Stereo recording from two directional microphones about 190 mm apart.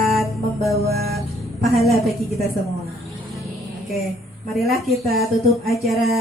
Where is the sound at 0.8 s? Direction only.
55° right (ahead or behind).